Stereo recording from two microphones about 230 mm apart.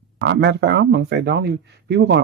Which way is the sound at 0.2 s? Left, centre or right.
Right.